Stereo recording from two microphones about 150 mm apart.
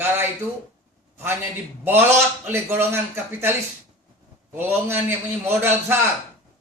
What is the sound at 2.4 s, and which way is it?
A man's voice, 15° right (ahead or behind).